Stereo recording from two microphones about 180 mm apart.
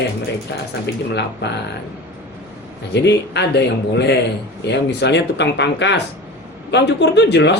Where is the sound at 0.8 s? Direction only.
70° left (ahead or behind).